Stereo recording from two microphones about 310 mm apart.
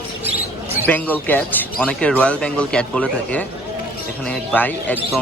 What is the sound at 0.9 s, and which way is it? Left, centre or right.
Speech, centre.